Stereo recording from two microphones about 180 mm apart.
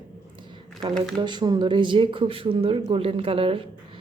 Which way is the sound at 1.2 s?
25° right (ahead or behind).